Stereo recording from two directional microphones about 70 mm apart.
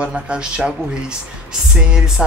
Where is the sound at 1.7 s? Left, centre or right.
Centre.